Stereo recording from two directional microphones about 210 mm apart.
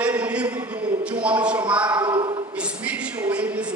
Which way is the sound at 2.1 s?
20° right (ahead or behind).